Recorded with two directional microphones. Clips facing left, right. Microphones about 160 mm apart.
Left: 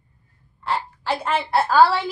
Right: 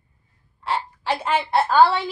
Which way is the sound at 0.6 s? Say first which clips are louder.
Even; centre (ahead or behind).